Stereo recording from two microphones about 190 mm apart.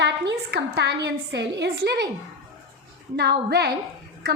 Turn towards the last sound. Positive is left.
turn(degrees=-55)  # may be behind; listen again after turning